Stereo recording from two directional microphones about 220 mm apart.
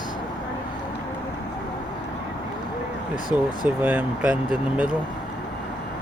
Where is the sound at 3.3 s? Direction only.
5° right (ahead or behind).